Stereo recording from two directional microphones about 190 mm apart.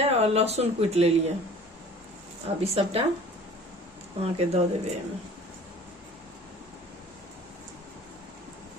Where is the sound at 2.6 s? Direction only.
30° right (ahead or behind).